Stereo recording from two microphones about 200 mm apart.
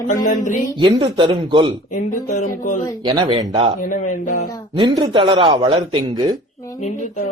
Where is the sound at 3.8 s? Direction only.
40° left (ahead or behind).